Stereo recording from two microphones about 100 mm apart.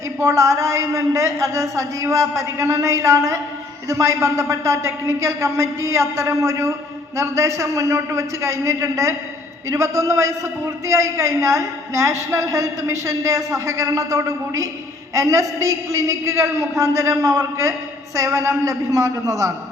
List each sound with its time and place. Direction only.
0.2 s a man's voice: 30° right (ahead or behind)